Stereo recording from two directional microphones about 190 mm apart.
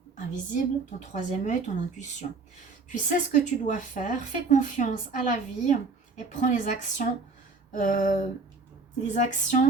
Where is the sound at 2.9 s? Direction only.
40° left (ahead or behind).